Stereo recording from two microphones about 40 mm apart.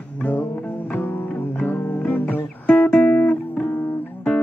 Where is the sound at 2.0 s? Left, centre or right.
Left.